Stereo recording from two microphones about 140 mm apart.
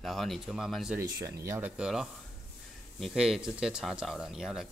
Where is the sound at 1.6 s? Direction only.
5° right (ahead or behind).